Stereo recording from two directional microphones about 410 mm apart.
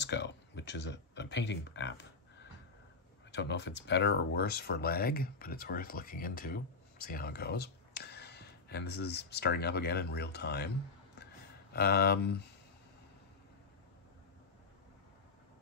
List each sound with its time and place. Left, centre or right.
0.0 s a sound: left
3.3 s speech: left
11.7 s speech: left